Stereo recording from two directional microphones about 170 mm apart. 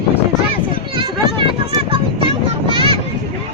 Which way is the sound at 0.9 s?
30° right (ahead or behind).